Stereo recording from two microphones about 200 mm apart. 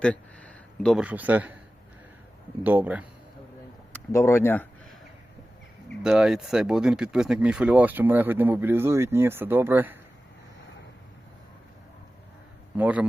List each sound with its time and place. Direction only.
0.0 s a man's voice: 5° left (ahead or behind)
2.6 s speech: 10° right (ahead or behind)
3.9 s speech: 15° left (ahead or behind)
6.0 s speech: 5° right (ahead or behind)
12.7 s speech: 5° right (ahead or behind)